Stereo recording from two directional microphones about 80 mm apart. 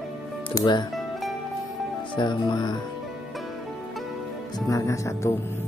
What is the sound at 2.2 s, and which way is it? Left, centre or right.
Speech, left.